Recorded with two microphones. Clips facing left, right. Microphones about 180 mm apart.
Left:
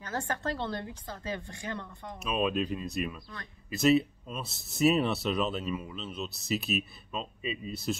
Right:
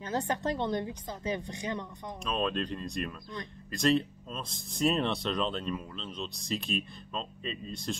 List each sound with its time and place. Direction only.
0.0 s a woman's voice: 20° right (ahead or behind)
2.2 s speech: 5° left (ahead or behind)